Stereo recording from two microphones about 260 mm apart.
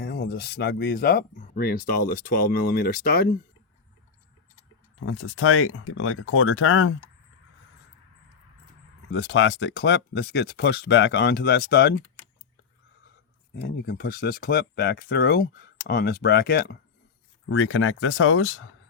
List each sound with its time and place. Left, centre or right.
0.0 s speech: left
5.0 s speech: left
9.1 s speech: left
13.6 s speech: left
17.5 s speech: left